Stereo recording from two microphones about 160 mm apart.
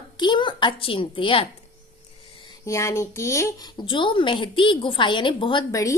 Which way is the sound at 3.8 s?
30° left (ahead or behind).